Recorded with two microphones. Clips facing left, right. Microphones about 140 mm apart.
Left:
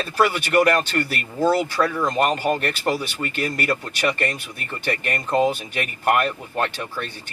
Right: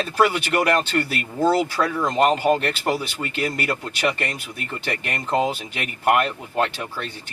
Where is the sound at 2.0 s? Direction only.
20° right (ahead or behind).